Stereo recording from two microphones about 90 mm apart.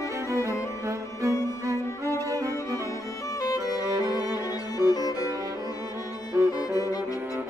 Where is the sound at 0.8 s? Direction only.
35° right (ahead or behind).